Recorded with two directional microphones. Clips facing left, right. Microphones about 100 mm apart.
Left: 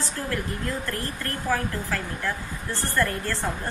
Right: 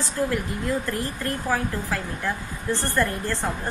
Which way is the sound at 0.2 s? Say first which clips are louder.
Right 5 dB; 20° right (ahead or behind).